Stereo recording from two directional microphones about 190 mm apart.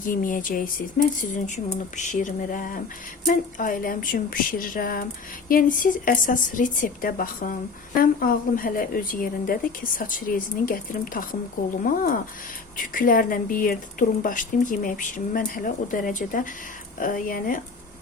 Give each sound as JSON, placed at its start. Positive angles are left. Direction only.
{"t": 0.0, "sound": "speech", "side_deg": 45}